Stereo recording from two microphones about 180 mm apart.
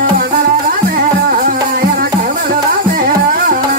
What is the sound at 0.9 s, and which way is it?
Music, 55° right (ahead or behind).